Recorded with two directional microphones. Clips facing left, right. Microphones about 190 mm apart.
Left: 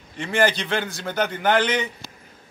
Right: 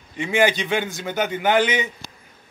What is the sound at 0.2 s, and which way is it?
A man's voice, 15° right (ahead or behind).